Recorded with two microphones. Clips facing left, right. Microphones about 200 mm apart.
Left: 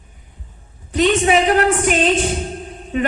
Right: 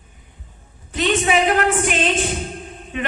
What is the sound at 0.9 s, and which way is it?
A woman's voice, 40° left (ahead or behind).